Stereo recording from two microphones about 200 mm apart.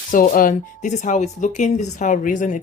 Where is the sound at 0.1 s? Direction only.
45° left (ahead or behind).